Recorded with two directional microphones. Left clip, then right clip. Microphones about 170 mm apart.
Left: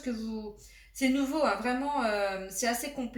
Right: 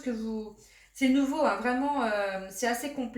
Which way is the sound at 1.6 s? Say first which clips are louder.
Right 2 dB; 20° right (ahead or behind).